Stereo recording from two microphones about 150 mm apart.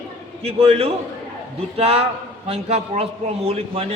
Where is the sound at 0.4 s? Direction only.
40° right (ahead or behind).